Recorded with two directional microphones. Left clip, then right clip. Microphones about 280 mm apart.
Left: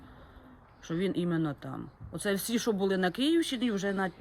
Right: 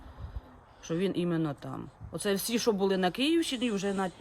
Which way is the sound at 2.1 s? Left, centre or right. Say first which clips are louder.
Right 1 dB; right.